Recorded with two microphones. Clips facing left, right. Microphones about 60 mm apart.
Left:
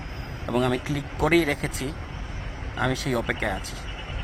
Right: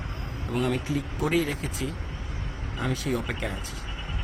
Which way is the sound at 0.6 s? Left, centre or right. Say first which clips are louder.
Left 1 dB; left.